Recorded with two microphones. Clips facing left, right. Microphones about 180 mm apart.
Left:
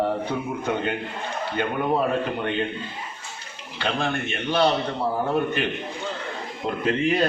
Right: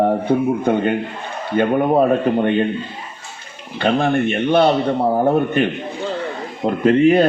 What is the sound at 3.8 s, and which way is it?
A man's voice, 55° right (ahead or behind).